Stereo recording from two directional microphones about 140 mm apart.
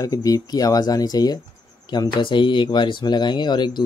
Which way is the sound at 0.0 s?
25° left (ahead or behind).